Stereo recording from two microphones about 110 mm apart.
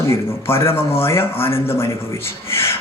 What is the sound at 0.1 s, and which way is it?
Speech, 25° left (ahead or behind).